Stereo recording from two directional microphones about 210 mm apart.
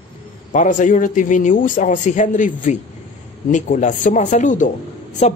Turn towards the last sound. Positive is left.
turn(degrees=30)  # may be behind; listen again after turning